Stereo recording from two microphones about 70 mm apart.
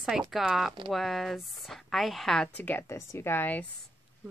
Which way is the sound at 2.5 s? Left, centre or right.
Left.